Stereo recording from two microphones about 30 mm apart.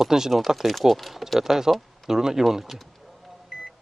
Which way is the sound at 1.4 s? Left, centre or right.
Centre.